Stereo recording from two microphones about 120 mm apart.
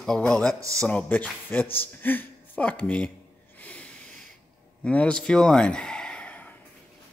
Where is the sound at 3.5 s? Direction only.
10° left (ahead or behind).